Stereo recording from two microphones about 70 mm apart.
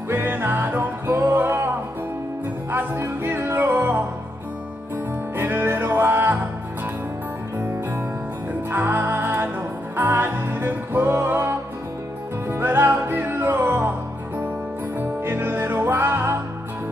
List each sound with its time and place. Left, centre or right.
0.1 s music: right
2.7 s music: right
5.4 s music: right
8.6 s music: right
15.0 s music: right